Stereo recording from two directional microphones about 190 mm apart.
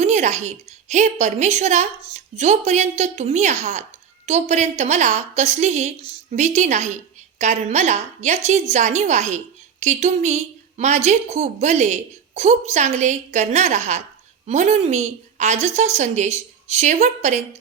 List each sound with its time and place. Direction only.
0.0 s a woman's voice: 35° right (ahead or behind)